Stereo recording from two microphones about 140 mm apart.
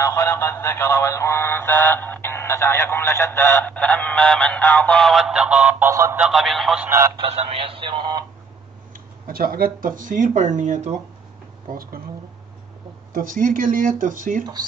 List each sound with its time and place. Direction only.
0.0 s mantra: 20° left (ahead or behind); by 6.2 s 20° right (ahead or behind)
6.2 s speech: centre (ahead or behind)
7.2 s speech: 45° right (ahead or behind)
9.3 s speech: 90° right; by 11.0 s 60° right (ahead or behind)
11.7 s speech: 90° right
13.1 s speech: 75° right (ahead or behind)